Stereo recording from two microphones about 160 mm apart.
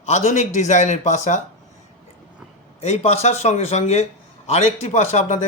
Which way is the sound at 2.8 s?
40° left (ahead or behind).